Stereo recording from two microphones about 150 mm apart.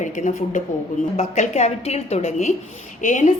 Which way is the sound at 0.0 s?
55° left (ahead or behind).